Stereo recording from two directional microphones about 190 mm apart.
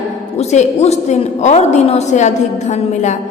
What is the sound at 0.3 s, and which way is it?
A woman's voice, 35° left (ahead or behind).